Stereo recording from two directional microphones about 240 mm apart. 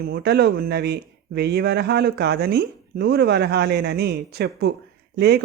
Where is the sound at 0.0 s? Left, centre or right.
Right.